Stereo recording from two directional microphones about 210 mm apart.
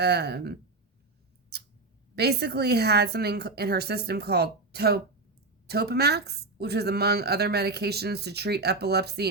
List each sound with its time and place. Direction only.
0.0 s a woman's voice: 50° right (ahead or behind)
2.1 s a woman's voice: 50° right (ahead or behind)